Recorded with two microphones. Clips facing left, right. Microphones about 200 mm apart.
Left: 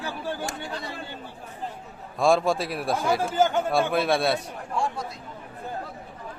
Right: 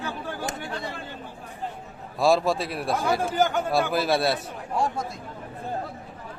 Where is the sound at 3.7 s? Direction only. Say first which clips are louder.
Right 1 dB; centre (ahead or behind).